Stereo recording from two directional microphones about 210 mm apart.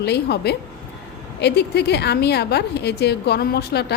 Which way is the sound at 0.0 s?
50° left (ahead or behind).